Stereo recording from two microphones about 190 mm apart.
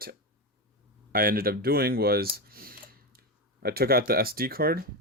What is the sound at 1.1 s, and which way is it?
Speech, 50° right (ahead or behind).